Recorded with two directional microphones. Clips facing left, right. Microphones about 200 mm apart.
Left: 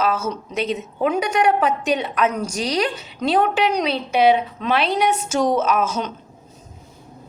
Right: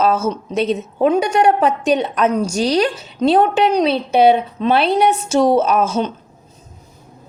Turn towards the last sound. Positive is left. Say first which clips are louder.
# right 4 dB
turn(degrees=-30)  # may be behind; listen again after turning